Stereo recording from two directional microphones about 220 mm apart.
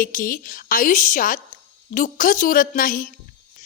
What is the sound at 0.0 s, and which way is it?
A woman's voice, 40° left (ahead or behind).